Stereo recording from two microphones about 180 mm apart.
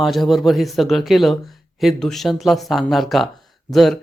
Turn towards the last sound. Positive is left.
turn(degrees=0)  # may be behind; listen again after turning